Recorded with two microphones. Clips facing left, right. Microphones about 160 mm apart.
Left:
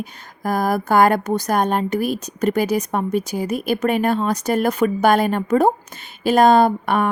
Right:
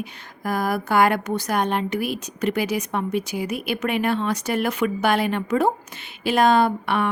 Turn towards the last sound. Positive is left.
turn(degrees=45)  # may be behind; listen again after turning